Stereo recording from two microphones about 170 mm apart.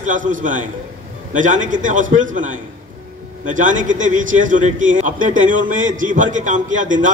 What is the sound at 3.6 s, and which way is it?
A man's voice, 50° right (ahead or behind).